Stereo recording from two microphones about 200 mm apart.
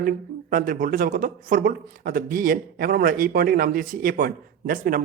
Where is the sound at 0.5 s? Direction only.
45° right (ahead or behind).